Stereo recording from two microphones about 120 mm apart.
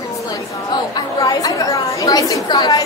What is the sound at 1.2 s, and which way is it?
A woman's voice, 30° left (ahead or behind).